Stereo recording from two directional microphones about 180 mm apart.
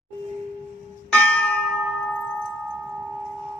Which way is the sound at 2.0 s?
5° left (ahead or behind).